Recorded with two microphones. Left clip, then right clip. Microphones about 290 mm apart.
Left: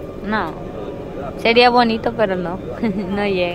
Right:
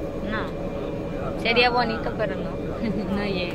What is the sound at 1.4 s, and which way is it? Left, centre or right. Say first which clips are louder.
Speech: left 8 dB; centre.